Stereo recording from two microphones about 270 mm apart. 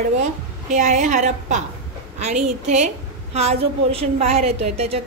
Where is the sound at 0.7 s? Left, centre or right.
Right.